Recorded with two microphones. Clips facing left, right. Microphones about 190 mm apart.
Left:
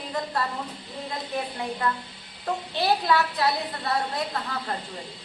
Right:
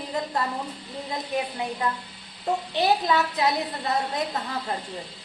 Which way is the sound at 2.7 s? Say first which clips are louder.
Even; 20° right (ahead or behind).